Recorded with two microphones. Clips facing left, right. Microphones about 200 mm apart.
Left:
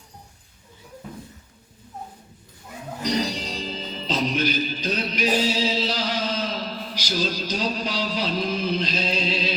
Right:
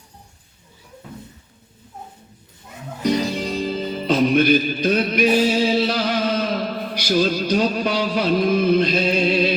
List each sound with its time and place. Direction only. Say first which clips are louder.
3.0 s music: right 5 dB; 55° right (ahead or behind)